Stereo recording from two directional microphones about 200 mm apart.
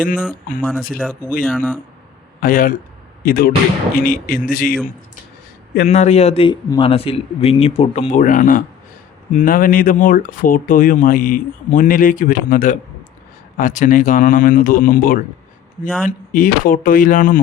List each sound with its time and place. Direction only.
0.6 s speech: 10° left (ahead or behind)
2.4 s speech: 45° left (ahead or behind)
6.0 s a man's voice: 30° left (ahead or behind)